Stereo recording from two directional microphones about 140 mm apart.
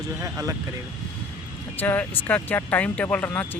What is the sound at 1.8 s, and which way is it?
Speech, 15° left (ahead or behind).